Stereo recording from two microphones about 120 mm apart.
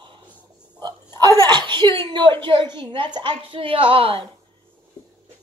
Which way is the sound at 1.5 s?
35° right (ahead or behind).